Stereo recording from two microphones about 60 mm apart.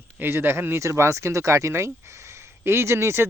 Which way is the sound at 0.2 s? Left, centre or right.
Right.